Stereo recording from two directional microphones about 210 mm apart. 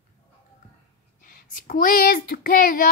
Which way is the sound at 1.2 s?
40° left (ahead or behind).